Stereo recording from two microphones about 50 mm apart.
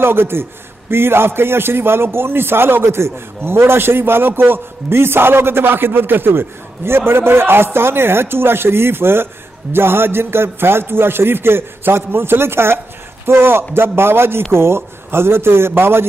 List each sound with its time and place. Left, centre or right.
0.0 s a man's voice: right